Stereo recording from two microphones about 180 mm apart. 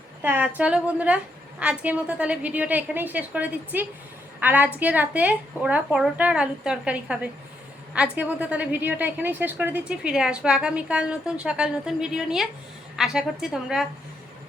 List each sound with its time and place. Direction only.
0.2 s a woman's voice: 10° right (ahead or behind)